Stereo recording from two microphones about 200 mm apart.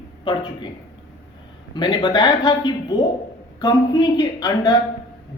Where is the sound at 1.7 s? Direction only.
20° left (ahead or behind).